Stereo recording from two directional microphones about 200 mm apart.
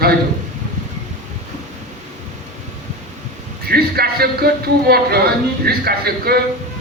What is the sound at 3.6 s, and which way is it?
A man's voice, 50° right (ahead or behind).